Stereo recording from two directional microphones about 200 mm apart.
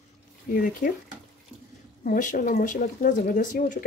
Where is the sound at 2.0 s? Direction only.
45° left (ahead or behind).